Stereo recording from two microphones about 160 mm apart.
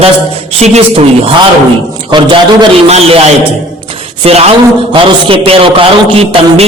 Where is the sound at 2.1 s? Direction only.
30° right (ahead or behind).